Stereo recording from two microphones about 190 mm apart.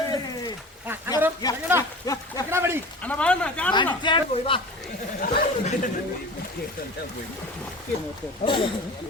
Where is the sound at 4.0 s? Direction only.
25° left (ahead or behind).